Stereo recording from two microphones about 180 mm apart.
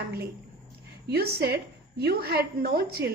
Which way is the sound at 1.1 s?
65° right (ahead or behind).